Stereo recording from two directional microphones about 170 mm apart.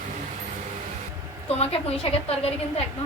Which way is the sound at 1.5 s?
35° left (ahead or behind).